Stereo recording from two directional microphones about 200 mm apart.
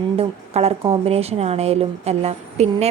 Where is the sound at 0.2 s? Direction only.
30° right (ahead or behind).